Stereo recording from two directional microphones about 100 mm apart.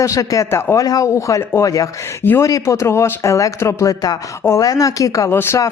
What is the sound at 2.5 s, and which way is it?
Speech, 35° left (ahead or behind).